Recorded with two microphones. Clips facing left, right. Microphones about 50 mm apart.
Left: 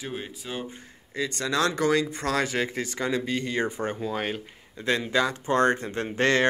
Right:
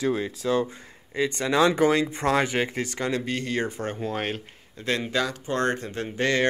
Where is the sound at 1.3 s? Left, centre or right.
Centre.